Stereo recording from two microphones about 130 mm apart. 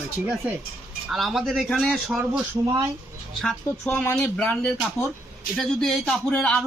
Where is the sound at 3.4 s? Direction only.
5° left (ahead or behind).